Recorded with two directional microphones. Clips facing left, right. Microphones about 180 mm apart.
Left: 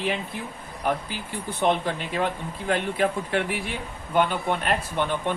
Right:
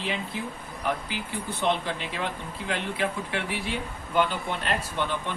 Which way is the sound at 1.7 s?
45° left (ahead or behind).